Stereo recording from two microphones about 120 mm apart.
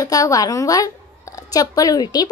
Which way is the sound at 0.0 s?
30° left (ahead or behind).